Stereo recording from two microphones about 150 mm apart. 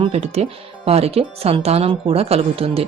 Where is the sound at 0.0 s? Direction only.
45° right (ahead or behind).